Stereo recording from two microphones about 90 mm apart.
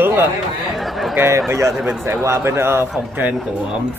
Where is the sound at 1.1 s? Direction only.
30° right (ahead or behind).